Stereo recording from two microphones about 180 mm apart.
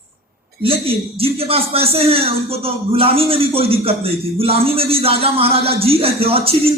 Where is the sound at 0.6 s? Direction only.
30° right (ahead or behind).